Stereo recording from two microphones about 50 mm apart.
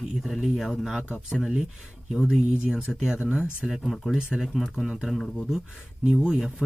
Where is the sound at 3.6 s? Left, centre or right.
Centre.